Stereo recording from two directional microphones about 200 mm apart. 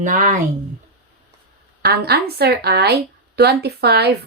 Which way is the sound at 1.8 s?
55° right (ahead or behind).